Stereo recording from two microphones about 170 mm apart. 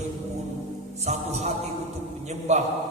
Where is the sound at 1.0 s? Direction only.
40° right (ahead or behind).